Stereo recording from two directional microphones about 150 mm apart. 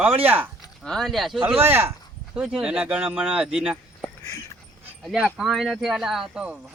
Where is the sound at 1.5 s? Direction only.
15° right (ahead or behind).